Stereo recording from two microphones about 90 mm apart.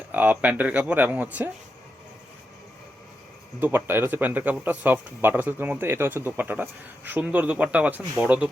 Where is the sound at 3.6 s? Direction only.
25° right (ahead or behind).